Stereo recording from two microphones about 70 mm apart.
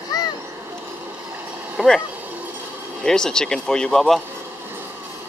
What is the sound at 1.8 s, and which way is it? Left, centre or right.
Vehicle, centre.